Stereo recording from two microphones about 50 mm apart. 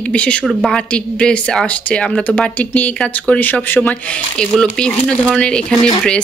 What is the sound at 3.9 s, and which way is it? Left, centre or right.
Speech, centre.